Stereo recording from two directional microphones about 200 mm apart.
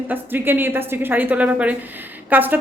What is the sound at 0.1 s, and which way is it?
A woman's voice, 10° right (ahead or behind).